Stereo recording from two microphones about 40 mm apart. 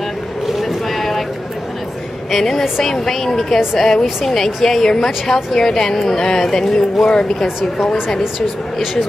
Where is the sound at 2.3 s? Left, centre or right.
Centre.